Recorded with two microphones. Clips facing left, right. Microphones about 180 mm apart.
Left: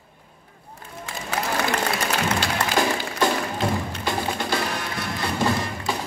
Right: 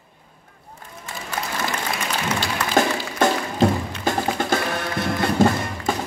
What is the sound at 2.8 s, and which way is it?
Music, 45° right (ahead or behind).